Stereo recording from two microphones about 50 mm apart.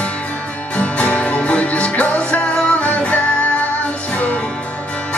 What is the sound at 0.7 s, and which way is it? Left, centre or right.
Music, left.